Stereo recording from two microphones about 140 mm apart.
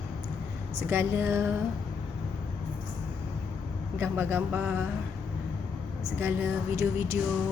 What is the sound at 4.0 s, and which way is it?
Speech, 15° right (ahead or behind).